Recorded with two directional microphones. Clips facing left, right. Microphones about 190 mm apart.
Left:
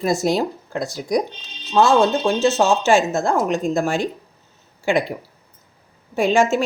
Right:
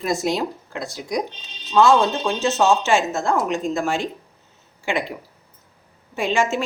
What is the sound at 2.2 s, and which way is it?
Speech, 35° left (ahead or behind).